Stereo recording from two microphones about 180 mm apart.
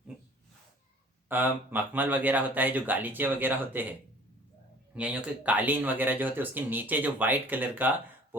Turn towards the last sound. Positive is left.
turn(degrees=-10)  # may be behind; listen again after turning